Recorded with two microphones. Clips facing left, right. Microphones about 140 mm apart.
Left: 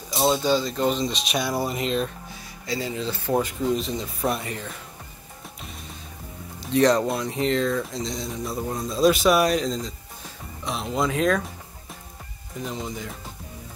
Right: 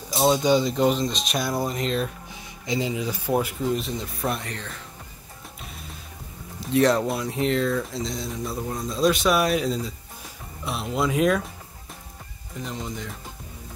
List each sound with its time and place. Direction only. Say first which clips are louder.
0.1 s speech: right 1 dB; 5° right (ahead or behind)
0.4 s speech: right 2 dB; 20° right (ahead or behind)
0.7 s speech: right 2 dB; 5° right (ahead or behind)
2.6 s speech: right 2 dB; 20° right (ahead or behind); by 4.7 s 5° left (ahead or behind)
6.6 s speech: left 1 dB; 5° right (ahead or behind)
12.5 s speech: left 1 dB; centre (ahead or behind)